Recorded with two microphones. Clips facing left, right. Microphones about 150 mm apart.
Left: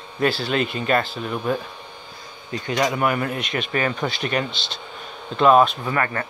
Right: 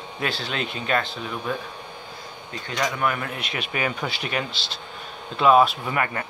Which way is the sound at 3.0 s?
5° left (ahead or behind).